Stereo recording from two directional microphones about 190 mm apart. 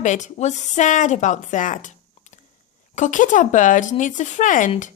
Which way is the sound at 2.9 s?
40° left (ahead or behind).